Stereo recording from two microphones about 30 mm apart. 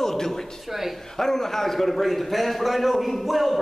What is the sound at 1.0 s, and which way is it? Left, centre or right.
A man's voice, centre.